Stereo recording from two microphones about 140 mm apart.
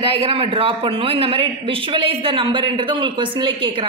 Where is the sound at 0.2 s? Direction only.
40° right (ahead or behind).